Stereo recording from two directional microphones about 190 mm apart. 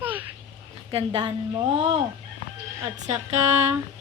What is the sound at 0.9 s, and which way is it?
Speech, 30° right (ahead or behind).